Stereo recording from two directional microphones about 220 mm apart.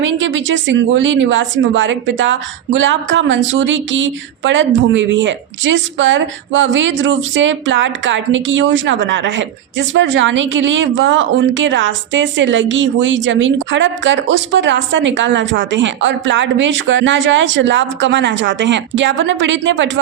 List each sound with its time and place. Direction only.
0.0 s speech: 55° right (ahead or behind)